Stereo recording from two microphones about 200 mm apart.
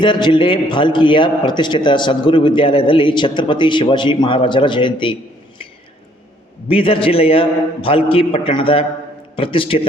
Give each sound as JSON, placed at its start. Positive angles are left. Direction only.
{"t": 0.0, "sound": "a man's voice", "side_deg": 25}
{"t": 6.7, "sound": "a man's voice", "side_deg": 25}